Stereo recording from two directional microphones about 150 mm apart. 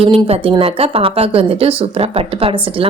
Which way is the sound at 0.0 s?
40° right (ahead or behind).